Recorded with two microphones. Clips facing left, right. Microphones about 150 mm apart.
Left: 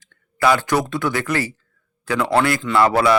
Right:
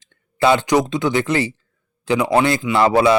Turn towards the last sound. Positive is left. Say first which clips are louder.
# right 2 dB
turn(degrees=-20)  # may be behind; listen again after turning